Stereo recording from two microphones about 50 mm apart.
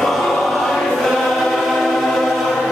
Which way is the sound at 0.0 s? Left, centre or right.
Centre.